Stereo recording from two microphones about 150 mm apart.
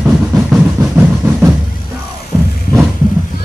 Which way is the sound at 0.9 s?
15° right (ahead or behind).